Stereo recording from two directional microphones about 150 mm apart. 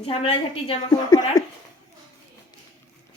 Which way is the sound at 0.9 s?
25° left (ahead or behind).